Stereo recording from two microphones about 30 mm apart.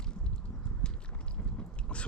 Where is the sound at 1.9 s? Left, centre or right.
Left.